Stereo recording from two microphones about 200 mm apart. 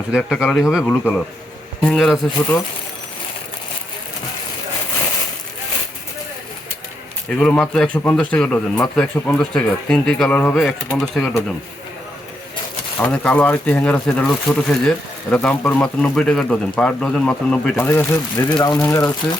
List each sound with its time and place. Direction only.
0.1 s speech: centre (ahead or behind)
0.9 s speech: 10° left (ahead or behind)
7.3 s speech: 5° left (ahead or behind)
13.0 s speech: 10° left (ahead or behind)